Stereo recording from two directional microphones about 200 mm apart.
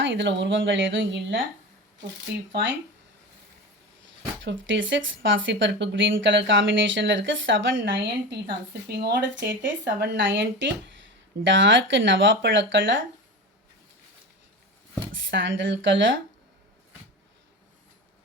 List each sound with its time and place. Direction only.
0.0 s speech: 65° right (ahead or behind)
2.5 s speech: 65° right (ahead or behind)
4.4 s speech: 65° right (ahead or behind)
15.1 s speech: 70° right (ahead or behind)